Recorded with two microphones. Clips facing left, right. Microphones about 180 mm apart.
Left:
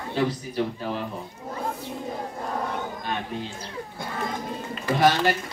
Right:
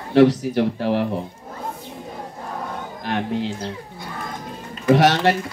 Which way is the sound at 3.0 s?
75° right (ahead or behind).